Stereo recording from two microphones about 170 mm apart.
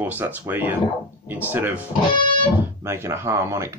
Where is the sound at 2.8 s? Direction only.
15° right (ahead or behind).